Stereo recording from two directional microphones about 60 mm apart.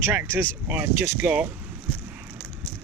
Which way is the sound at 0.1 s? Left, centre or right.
Right.